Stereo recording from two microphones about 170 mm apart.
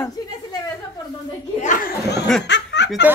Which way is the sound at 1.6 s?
45° left (ahead or behind).